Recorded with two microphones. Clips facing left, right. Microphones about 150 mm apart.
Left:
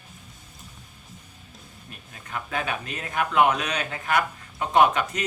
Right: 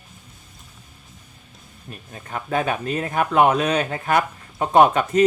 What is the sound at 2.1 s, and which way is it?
Speech, 40° right (ahead or behind).